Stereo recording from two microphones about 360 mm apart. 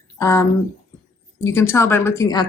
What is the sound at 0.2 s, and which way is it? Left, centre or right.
Speech, centre.